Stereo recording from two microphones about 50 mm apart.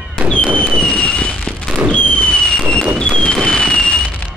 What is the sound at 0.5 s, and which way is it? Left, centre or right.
Fireworks, right.